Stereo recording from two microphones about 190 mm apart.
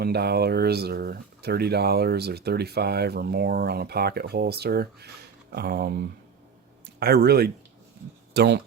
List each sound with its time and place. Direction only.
0.0 s speech: 55° right (ahead or behind)